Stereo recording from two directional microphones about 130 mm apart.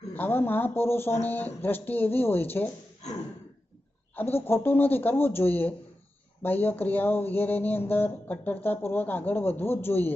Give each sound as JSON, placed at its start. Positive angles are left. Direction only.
{"t": 0.1, "sound": "speech", "side_deg": 15}
{"t": 4.1, "sound": "speech", "side_deg": 15}